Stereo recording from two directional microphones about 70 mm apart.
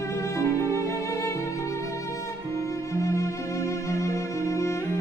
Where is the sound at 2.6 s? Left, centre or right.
Left.